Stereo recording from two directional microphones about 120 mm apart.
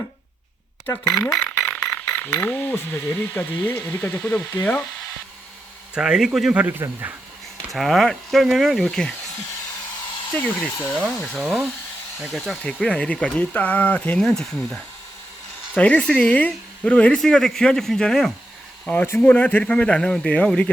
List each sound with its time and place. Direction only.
1.7 s a sound: 10° left (ahead or behind)
2.3 s speech: 15° left (ahead or behind)
5.9 s speech: 5° right (ahead or behind)
7.7 s speech: centre (ahead or behind)
10.3 s speech: 15° left (ahead or behind)
11.3 s speech: 5° right (ahead or behind)
18.9 s speech: 15° left (ahead or behind)